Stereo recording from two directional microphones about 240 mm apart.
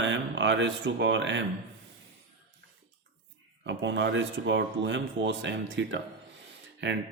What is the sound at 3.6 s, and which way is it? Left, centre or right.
A man's voice, right.